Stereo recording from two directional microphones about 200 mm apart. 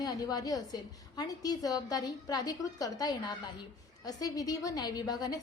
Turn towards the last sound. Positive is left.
turn(degrees=20)  # may be behind; listen again after turning